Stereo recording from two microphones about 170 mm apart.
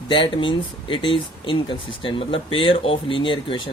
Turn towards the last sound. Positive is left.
turn(degrees=30)  # may be behind; listen again after turning